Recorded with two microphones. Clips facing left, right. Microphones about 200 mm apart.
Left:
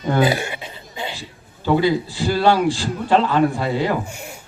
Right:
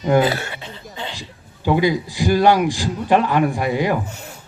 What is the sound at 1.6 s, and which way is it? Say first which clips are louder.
A man's voice: even; 15° right (ahead or behind).